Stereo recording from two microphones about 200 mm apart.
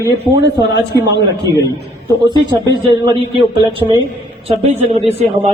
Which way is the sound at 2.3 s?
20° right (ahead or behind).